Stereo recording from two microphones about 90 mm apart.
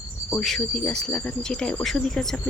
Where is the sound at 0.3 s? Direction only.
10° left (ahead or behind).